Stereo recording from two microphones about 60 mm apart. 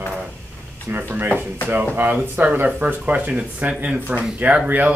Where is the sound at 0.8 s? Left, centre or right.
Right.